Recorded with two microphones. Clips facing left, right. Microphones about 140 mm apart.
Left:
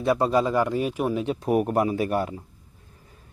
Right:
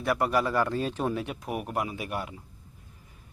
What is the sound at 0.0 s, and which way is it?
Speech, 20° left (ahead or behind).